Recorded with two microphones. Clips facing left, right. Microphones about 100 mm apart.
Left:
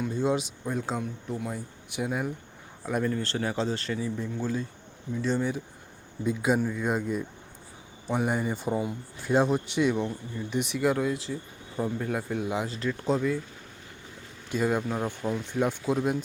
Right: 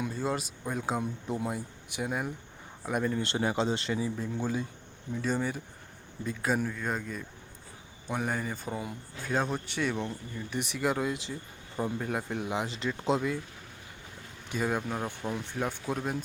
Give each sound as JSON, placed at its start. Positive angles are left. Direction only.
{"t": 0.1, "sound": "speech", "side_deg": 0}
{"t": 1.3, "sound": "speech", "side_deg": -20}
{"t": 2.0, "sound": "speech", "side_deg": 0}
{"t": 10.8, "sound": "speech", "side_deg": -5}
{"t": 12.8, "sound": "speech", "side_deg": -15}
{"t": 14.6, "sound": "speech", "side_deg": 0}